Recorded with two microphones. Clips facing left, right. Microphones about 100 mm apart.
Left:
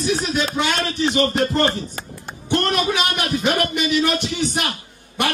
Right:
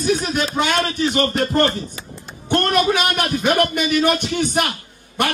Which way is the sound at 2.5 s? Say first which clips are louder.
Right 3 dB; 50° right (ahead or behind).